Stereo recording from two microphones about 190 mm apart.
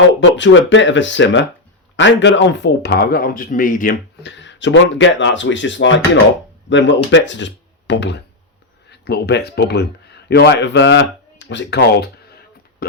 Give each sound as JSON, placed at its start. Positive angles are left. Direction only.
{"t": 0.2, "sound": "speech", "side_deg": 75}
{"t": 4.2, "sound": "speech", "side_deg": 70}